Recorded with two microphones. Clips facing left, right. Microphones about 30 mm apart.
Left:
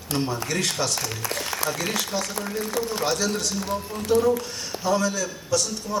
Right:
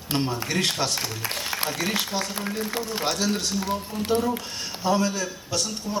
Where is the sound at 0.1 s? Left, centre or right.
Right.